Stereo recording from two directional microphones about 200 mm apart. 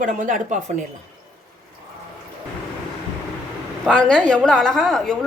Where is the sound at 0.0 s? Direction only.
40° right (ahead or behind).